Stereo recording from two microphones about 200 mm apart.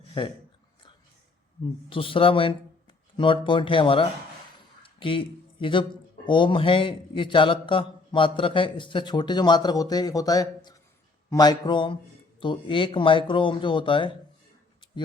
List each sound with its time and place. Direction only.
0.2 s a man's voice: 25° left (ahead or behind)
1.9 s a man's voice: 25° left (ahead or behind)
4.8 s a sound: 25° left (ahead or behind)
6.2 s a man's voice: 25° left (ahead or behind)